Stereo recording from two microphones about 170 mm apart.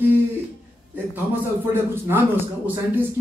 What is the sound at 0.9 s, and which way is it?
A man's voice, 10° right (ahead or behind).